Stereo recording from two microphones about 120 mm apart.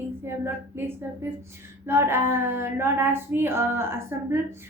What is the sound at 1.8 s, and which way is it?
A woman's voice, 20° right (ahead or behind).